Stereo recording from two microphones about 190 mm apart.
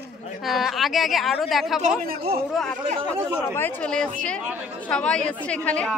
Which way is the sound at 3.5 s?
10° left (ahead or behind).